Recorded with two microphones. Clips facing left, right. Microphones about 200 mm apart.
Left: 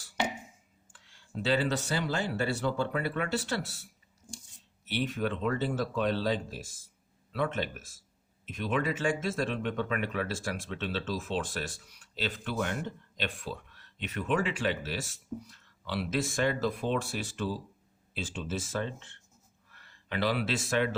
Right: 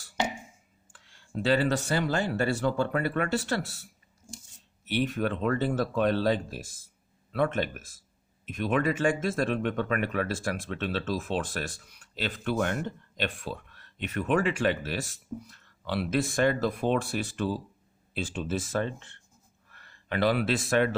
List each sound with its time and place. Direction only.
0.9 s speech: 50° right (ahead or behind)
4.2 s a sound: 5° left (ahead or behind)
4.9 s speech: 55° right (ahead or behind)